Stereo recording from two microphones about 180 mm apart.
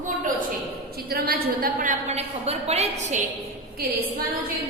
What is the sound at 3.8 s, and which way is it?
Speech, 60° right (ahead or behind).